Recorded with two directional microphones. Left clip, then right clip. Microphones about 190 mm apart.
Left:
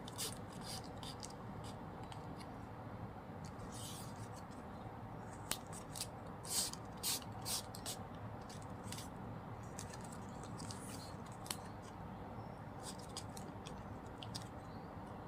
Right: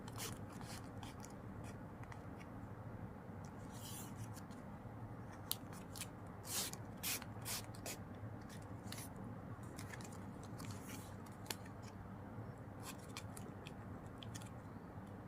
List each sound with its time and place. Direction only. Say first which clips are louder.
6.5 s rub: left 3 dB; 15° right (ahead or behind)